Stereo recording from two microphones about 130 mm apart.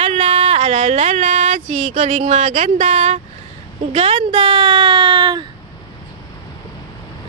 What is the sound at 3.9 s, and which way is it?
A woman's voice, 50° right (ahead or behind).